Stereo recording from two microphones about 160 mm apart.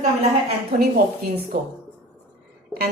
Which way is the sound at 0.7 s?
70° right (ahead or behind).